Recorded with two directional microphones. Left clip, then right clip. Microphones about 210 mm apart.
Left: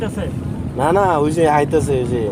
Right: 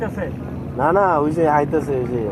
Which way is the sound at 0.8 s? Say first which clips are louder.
Left 1 dB; 20° left (ahead or behind).